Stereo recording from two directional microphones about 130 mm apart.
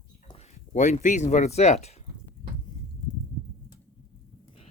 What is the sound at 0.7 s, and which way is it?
Speech, 70° left (ahead or behind).